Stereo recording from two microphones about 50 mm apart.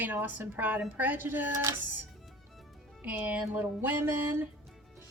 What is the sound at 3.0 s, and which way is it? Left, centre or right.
Music, right.